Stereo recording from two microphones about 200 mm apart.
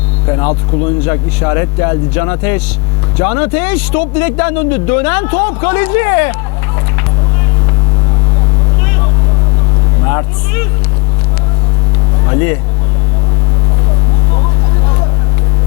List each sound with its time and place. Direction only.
0.3 s speech: 20° left (ahead or behind)
10.0 s vehicle: 20° left (ahead or behind)
12.3 s vehicle: 15° left (ahead or behind)